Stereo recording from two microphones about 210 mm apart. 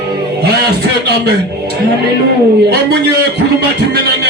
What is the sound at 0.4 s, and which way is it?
Speech, 50° right (ahead or behind).